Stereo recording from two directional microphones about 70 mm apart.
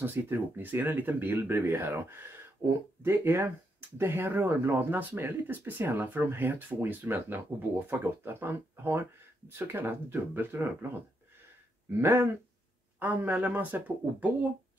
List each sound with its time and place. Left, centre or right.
0.0 s speech: right
12.0 s speech: right